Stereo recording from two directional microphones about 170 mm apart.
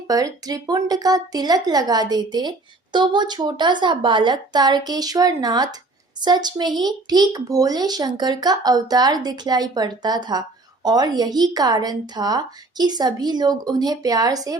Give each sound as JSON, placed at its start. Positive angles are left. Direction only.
{"t": 0.1, "sound": "speech", "side_deg": -20}